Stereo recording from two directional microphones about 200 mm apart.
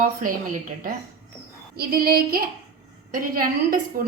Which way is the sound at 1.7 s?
50° right (ahead or behind).